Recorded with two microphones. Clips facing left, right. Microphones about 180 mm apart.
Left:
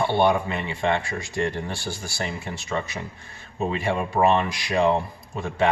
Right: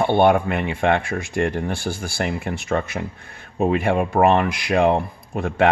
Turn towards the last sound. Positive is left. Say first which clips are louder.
# right 5 dB
turn(degrees=-60)  # may be behind; listen again after turning